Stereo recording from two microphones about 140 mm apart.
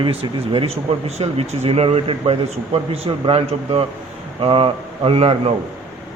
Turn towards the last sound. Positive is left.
turn(degrees=-45)  # may be behind; listen again after turning